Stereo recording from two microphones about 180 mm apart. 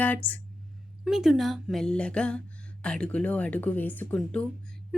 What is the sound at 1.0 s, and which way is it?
A woman's voice, centre (ahead or behind).